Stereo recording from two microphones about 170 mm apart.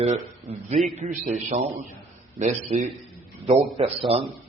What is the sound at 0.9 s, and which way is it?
A man's voice, 45° right (ahead or behind).